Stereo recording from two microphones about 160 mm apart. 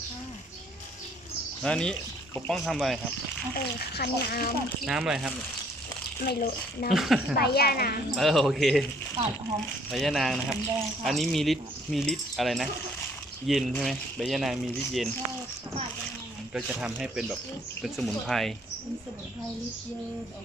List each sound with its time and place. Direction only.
1.6 s speech: 5° left (ahead or behind)
3.5 s speech: 85° left
4.9 s speech: 5° right (ahead or behind)
6.2 s speech: 80° left
6.9 s speech: centre (ahead or behind)
7.3 s speech: 80° left
8.1 s speech: centre (ahead or behind)
9.9 s speech: centre (ahead or behind)
16.6 s speech: 5° right (ahead or behind)